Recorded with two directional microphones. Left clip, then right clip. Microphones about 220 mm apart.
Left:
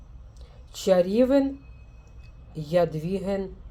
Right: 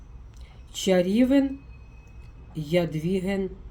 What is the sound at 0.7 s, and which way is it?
Speech, 20° left (ahead or behind).